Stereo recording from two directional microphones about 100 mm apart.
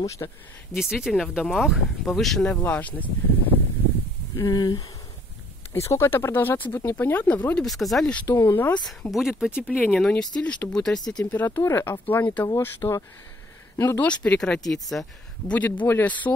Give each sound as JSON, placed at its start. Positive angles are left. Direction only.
{"t": 0.2, "sound": "speech", "side_deg": 35}
{"t": 0.7, "sound": "speech", "side_deg": -5}
{"t": 2.5, "sound": "speech", "side_deg": 15}
{"t": 4.4, "sound": "speech", "side_deg": 40}
{"t": 5.7, "sound": "speech", "side_deg": 30}
{"t": 7.6, "sound": "speech", "side_deg": 0}
{"t": 8.3, "sound": "speech", "side_deg": 25}
{"t": 9.1, "sound": "speech", "side_deg": -5}
{"t": 9.5, "sound": "speech", "side_deg": 20}
{"t": 9.8, "sound": "speech", "side_deg": 5}
{"t": 11.3, "sound": "speech", "side_deg": 20}
{"t": 14.0, "sound": "speech", "side_deg": 10}
{"t": 15.5, "sound": "speech", "side_deg": 15}